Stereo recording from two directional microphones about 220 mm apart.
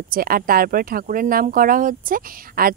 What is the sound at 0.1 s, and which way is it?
Speech, 40° right (ahead or behind).